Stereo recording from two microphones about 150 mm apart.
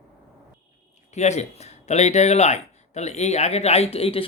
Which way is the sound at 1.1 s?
50° left (ahead or behind).